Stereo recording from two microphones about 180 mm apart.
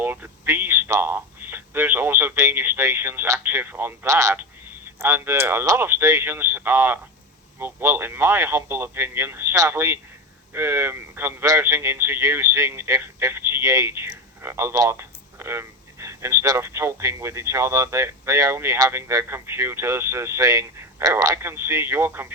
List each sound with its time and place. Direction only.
0.0 s a man's voice: 10° right (ahead or behind)